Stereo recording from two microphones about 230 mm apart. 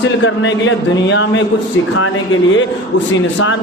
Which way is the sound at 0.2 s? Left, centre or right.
Left.